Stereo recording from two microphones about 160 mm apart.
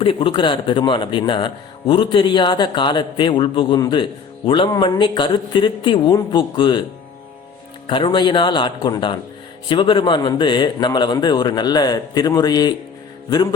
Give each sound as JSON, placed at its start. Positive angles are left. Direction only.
{"t": 0.0, "sound": "a man's voice", "side_deg": 35}
{"t": 7.9, "sound": "a man's voice", "side_deg": 30}